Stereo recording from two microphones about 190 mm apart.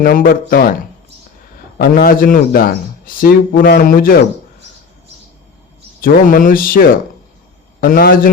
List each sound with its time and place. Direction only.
0.0 s speech: 50° left (ahead or behind)
1.8 s speech: 50° left (ahead or behind)
6.0 s speech: 45° left (ahead or behind)